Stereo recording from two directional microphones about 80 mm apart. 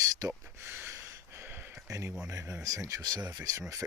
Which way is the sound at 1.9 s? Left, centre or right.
Right.